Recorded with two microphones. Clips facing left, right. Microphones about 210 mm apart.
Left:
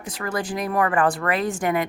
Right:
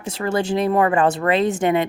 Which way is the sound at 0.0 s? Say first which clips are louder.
Right 6 dB; 25° right (ahead or behind).